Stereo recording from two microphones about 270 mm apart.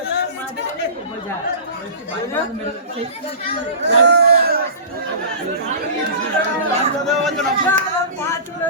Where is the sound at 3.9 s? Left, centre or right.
Right.